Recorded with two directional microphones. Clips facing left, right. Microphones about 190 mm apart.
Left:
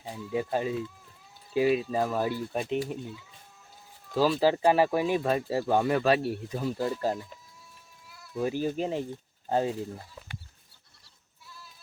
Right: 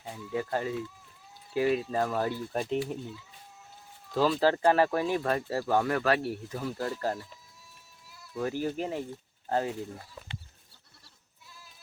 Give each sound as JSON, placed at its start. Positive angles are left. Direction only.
{"t": 0.1, "sound": "speech", "side_deg": 15}
{"t": 4.1, "sound": "speech", "side_deg": 5}
{"t": 8.4, "sound": "speech", "side_deg": 15}